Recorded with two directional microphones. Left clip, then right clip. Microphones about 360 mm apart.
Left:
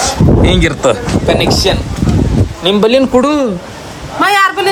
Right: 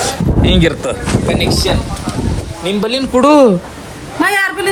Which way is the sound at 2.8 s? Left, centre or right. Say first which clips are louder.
Left 9 dB; left.